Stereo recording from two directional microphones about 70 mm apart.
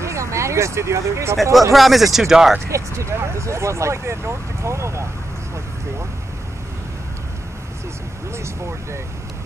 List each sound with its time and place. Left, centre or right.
0.0 s speech: right
1.7 s speech: centre
2.7 s speech: right